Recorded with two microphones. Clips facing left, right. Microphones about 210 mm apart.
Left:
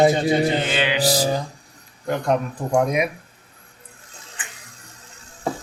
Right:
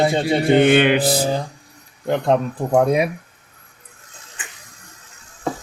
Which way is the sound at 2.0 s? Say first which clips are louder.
Right 3 dB; 25° right (ahead or behind).